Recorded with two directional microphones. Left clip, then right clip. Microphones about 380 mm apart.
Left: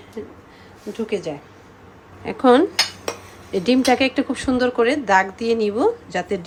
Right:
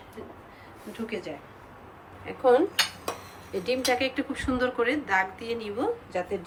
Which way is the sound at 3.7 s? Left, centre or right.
Centre.